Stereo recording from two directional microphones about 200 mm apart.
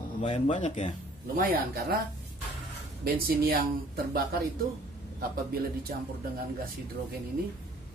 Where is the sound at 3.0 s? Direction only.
50° right (ahead or behind).